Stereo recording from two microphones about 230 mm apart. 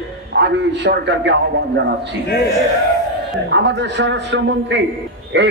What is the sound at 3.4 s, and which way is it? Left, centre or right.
A man's voice, right.